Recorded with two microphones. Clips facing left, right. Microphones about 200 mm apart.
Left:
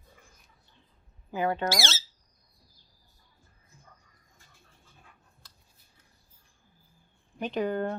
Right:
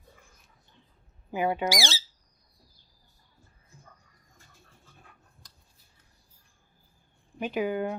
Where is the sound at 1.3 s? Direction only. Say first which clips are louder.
Right 1 dB; 15° right (ahead or behind).